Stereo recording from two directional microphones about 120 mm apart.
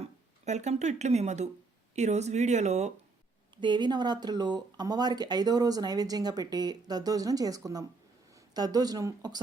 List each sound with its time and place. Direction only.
0.0 s speech: 70° right (ahead or behind)
3.6 s speech: 40° right (ahead or behind)